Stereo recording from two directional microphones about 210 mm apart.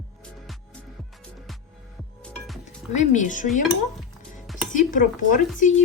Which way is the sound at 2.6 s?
35° left (ahead or behind).